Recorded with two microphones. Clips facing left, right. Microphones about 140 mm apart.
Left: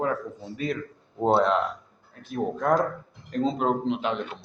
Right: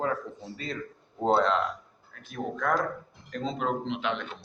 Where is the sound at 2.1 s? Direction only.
35° left (ahead or behind).